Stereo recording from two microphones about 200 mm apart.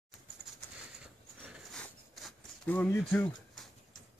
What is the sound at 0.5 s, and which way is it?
Bird, centre (ahead or behind).